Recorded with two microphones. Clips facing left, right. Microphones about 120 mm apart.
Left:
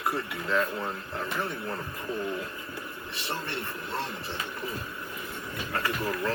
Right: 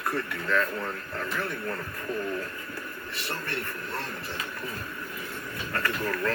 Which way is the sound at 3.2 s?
20° left (ahead or behind).